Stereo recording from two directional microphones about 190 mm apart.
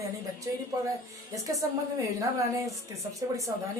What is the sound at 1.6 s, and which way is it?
A woman's voice, 15° right (ahead or behind).